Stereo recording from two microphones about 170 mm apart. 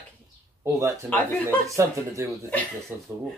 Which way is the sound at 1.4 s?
15° right (ahead or behind).